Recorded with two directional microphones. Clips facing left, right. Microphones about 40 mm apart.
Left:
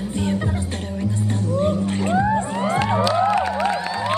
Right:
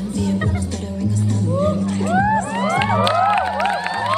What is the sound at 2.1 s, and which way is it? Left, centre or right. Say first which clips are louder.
Music: right 3 dB; right.